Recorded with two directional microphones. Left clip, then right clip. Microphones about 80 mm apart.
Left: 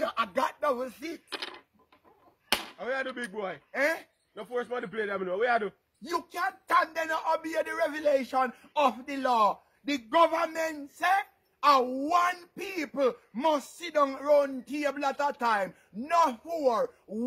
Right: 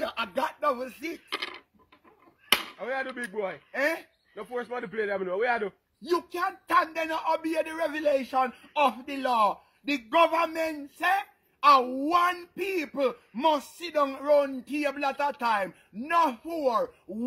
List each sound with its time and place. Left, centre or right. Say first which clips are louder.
0.0 s a sound: left 2 dB; left
0.4 s a sound: right 2 dB; left
0.7 s a man's voice: even; left
1.3 s coin: right 5 dB; right
2.8 s a man's voice: right 1 dB; left
9.9 s a man's voice: right 1 dB; centre